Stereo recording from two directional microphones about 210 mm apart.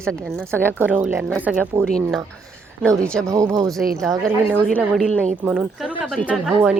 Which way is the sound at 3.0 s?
5° left (ahead or behind).